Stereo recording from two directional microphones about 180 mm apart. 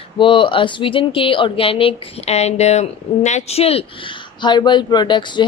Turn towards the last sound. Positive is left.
turn(degrees=25)  # may be behind; listen again after turning